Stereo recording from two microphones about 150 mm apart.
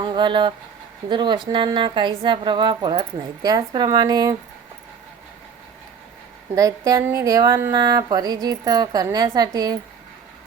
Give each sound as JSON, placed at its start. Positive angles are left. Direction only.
{"t": 0.0, "sound": "a woman's voice", "side_deg": -30}
{"t": 6.6, "sound": "a woman's voice", "side_deg": -20}